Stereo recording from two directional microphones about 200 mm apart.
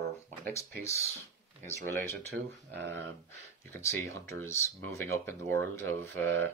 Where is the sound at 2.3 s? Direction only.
60° right (ahead or behind).